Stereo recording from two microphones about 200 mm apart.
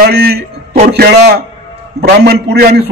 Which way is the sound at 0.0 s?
50° right (ahead or behind).